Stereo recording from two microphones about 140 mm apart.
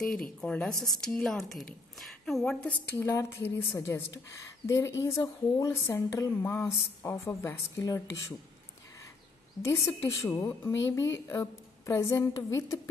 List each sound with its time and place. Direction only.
0.4 s a woman's voice: 5° left (ahead or behind)
9.6 s speech: 20° left (ahead or behind)